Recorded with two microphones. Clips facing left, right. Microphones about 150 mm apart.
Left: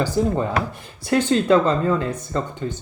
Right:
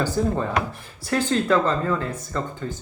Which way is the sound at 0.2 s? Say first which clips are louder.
Left 3 dB; 15° left (ahead or behind).